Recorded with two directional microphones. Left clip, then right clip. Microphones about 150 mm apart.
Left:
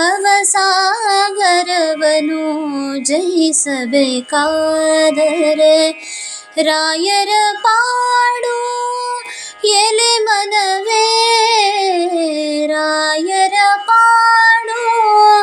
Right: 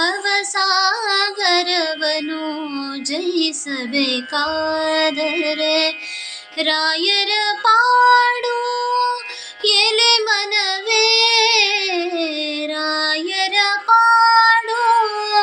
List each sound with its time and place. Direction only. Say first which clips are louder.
0.0 s female singing: left 6 dB; 45° left (ahead or behind)
3.1 s a sound: left 6 dB; 50° left (ahead or behind)
3.9 s music: left 5 dB; 45° left (ahead or behind)
6.6 s child singing: left 4 dB; 50° left (ahead or behind)
9.6 s child singing: left 2 dB; 50° left (ahead or behind)